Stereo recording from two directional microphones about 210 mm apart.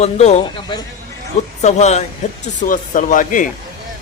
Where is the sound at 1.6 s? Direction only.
30° left (ahead or behind).